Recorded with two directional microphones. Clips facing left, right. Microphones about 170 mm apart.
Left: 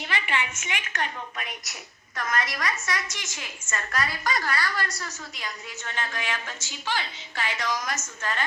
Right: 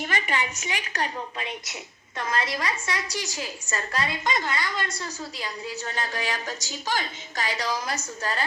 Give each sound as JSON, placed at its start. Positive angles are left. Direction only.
{"t": 0.0, "sound": "a woman's voice", "side_deg": -40}